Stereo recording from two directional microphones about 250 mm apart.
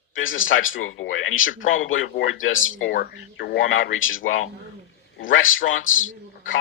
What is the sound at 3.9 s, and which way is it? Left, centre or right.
A man's voice, left.